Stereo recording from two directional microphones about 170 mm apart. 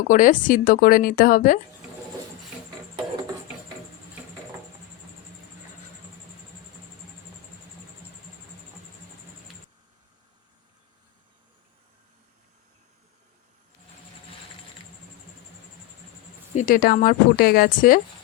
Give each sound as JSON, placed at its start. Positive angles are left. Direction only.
{"t": 0.1, "sound": "speech", "side_deg": 50}
{"t": 16.6, "sound": "speech", "side_deg": 55}